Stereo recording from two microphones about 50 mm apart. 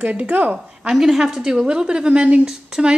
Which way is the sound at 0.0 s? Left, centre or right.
Right.